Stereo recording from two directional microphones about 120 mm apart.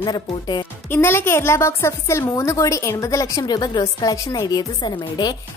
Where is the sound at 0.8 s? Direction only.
20° left (ahead or behind); by 5.4 s 35° left (ahead or behind).